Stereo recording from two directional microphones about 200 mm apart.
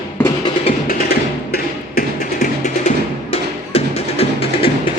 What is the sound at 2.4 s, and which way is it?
Music, 35° left (ahead or behind).